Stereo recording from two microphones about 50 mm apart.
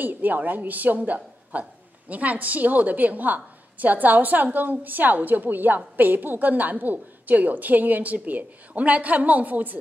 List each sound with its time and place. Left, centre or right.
0.0 s a woman's voice: right